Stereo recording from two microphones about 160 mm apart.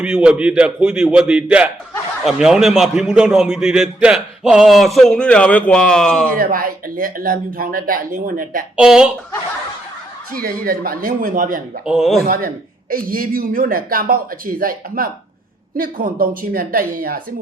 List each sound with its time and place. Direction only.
0.0 s a man's voice: 5° right (ahead or behind)
6.3 s speech: 65° right (ahead or behind)
8.7 s a man's voice: 5° right (ahead or behind)
10.3 s speech: 65° right (ahead or behind)
11.9 s a man's voice: centre (ahead or behind)
12.2 s speech: 65° right (ahead or behind)